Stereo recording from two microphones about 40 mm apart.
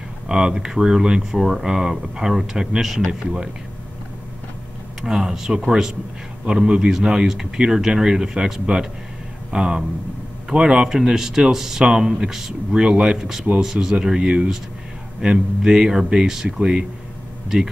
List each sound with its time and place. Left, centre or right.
0.3 s speech: right
5.0 s speech: centre
6.5 s speech: centre
11.0 s speech: centre
12.8 s speech: right